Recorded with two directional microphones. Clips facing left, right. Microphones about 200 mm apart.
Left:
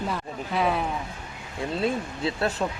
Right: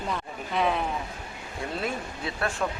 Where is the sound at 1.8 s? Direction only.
25° left (ahead or behind).